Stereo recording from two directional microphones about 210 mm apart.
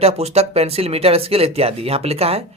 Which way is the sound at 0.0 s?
30° right (ahead or behind).